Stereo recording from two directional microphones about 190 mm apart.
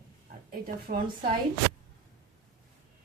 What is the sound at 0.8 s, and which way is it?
Speech, 50° right (ahead or behind).